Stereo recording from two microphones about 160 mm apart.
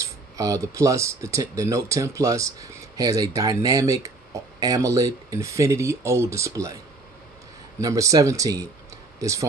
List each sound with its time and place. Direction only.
0.0 s speech: 20° right (ahead or behind)
7.8 s speech: 20° right (ahead or behind)